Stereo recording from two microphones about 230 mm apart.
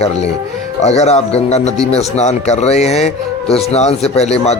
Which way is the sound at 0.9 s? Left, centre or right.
Left.